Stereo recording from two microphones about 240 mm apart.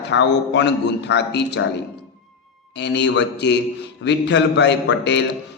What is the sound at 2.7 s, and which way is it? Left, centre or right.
A man's voice, left.